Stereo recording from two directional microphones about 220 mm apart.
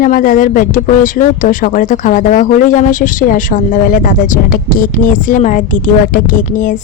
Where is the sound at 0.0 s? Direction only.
40° left (ahead or behind).